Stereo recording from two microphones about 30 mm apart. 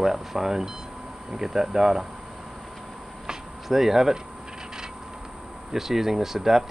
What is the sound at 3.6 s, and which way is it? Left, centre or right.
Speech, centre.